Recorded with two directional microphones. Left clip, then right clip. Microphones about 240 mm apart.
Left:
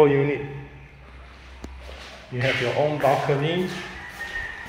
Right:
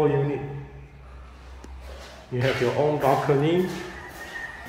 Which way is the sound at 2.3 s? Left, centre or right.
Centre.